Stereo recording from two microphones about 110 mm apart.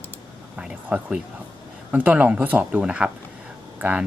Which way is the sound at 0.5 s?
10° right (ahead or behind).